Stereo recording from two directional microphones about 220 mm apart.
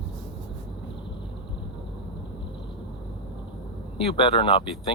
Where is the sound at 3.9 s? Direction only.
25° left (ahead or behind).